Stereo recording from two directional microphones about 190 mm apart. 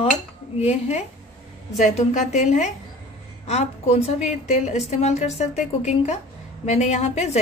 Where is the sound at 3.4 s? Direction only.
35° left (ahead or behind).